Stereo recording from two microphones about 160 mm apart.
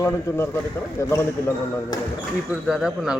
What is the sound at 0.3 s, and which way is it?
Speech, 20° left (ahead or behind).